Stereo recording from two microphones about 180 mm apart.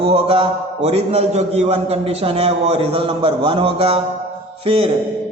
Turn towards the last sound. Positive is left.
turn(degrees=-30)  # may be behind; listen again after turning